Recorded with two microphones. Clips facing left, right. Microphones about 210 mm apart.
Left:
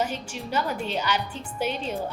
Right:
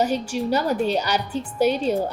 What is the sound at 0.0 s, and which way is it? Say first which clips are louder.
A woman's voice: right 8 dB; 40° right (ahead or behind).